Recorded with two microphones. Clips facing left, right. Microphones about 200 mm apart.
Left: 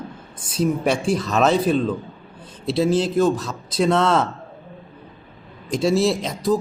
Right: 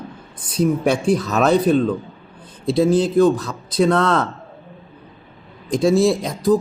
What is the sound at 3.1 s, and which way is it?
A man's voice, centre (ahead or behind).